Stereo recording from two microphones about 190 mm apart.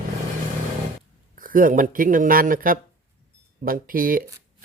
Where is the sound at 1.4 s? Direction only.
45° right (ahead or behind).